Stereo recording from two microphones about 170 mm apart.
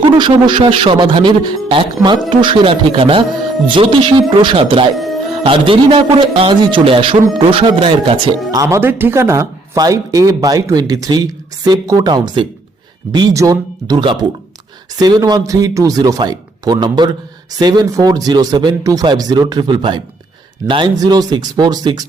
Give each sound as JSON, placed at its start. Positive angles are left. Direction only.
{"t": 0.2, "sound": "a man's voice", "side_deg": -30}
{"t": 8.6, "sound": "speech", "side_deg": -15}